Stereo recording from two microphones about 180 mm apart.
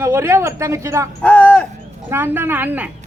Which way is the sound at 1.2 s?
10° left (ahead or behind).